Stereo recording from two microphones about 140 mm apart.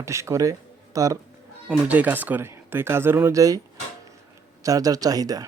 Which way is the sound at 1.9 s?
10° right (ahead or behind).